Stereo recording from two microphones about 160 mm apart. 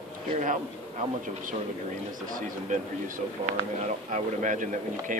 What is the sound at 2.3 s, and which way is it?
Speech, 55° right (ahead or behind).